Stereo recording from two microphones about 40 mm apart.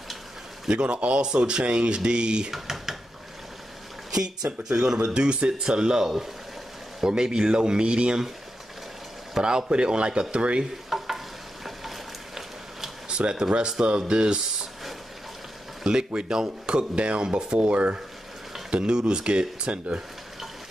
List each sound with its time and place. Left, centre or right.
0.7 s speech: right
2.5 s speech: centre
4.1 s speech: centre
9.4 s speech: right
10.9 s stir: centre
13.1 s speech: right
15.8 s a sound: centre
16.1 s speech: centre